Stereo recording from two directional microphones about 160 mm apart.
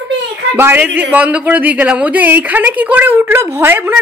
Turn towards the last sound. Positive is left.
turn(degrees=-15)  # may be behind; listen again after turning